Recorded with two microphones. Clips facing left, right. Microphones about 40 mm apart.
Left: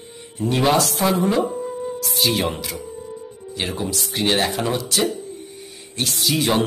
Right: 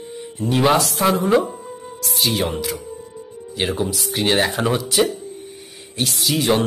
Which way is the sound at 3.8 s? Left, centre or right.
Centre.